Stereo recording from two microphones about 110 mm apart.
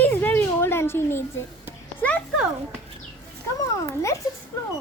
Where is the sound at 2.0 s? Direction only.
15° left (ahead or behind).